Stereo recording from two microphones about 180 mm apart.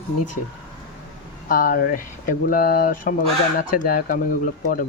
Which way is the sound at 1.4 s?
55° left (ahead or behind).